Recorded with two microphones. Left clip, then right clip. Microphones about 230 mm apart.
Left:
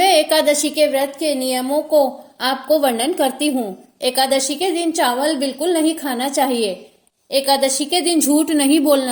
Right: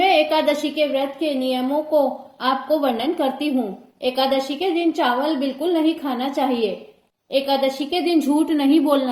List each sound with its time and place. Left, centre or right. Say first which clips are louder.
0.0 s a woman's voice: left 3 dB; left